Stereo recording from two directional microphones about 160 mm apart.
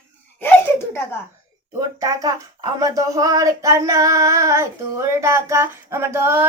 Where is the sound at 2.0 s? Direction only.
20° right (ahead or behind).